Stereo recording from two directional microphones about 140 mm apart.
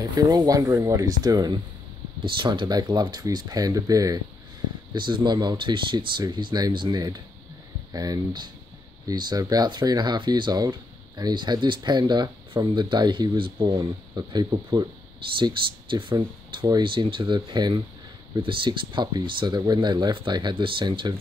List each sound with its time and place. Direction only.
0.0 s speech: 30° right (ahead or behind)